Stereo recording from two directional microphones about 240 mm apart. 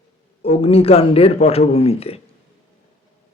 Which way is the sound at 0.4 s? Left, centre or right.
Left.